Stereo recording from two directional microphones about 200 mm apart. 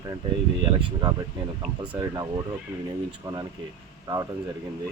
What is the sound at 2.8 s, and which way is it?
Speech, 20° right (ahead or behind).